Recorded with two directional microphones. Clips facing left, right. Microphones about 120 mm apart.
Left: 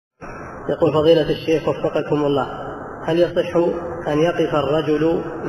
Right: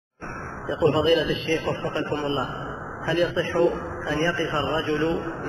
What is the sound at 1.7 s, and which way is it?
Speech, 45° left (ahead or behind).